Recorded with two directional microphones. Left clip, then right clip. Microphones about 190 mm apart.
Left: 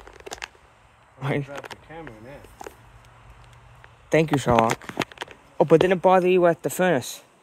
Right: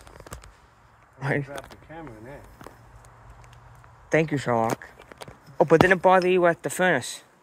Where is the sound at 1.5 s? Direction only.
Centre (ahead or behind).